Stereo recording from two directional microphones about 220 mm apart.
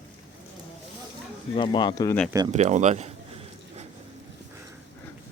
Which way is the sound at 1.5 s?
20° left (ahead or behind).